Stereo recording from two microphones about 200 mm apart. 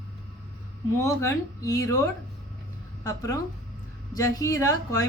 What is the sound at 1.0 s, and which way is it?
Speech, 15° left (ahead or behind).